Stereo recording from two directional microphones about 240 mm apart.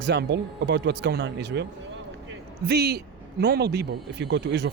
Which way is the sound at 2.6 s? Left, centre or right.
Right.